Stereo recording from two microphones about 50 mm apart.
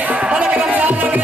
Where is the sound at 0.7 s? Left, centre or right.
Right.